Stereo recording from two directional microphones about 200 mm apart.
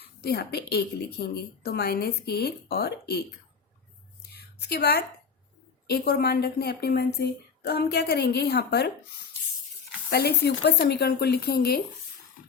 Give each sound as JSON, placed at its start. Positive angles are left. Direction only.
{"t": 0.0, "sound": "a woman's voice", "side_deg": 55}
{"t": 4.3, "sound": "a sound", "side_deg": 55}
{"t": 5.9, "sound": "a woman's voice", "side_deg": 55}
{"t": 10.1, "sound": "a woman's voice", "side_deg": 55}